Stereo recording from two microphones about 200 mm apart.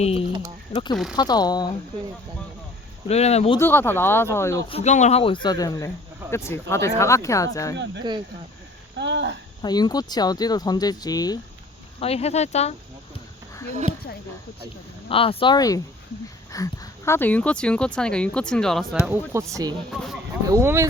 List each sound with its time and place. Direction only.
0.0 s speech: 30° left (ahead or behind)
3.1 s speech: 30° left (ahead or behind)
3.6 s speech: 10° left (ahead or behind)
4.7 s speech: 35° left (ahead or behind); by 7.8 s 15° left (ahead or behind)
9.0 s a sound: 60° right (ahead or behind)
9.6 s speech: 20° left (ahead or behind)
11.9 s speech: 30° left (ahead or behind)
15.1 s speech: 25° left (ahead or behind); by 18.9 s centre (ahead or behind)
19.0 s speech: 10° right (ahead or behind)
19.9 s speech: centre (ahead or behind)
20.5 s speech: 15° right (ahead or behind)